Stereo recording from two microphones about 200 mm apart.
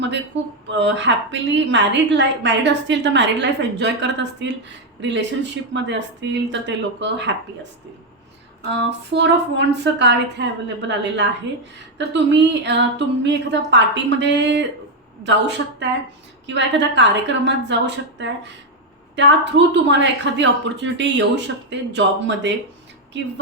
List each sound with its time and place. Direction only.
0.7 s a woman's voice: 65° right (ahead or behind)
8.9 s a woman's voice: 60° right (ahead or behind)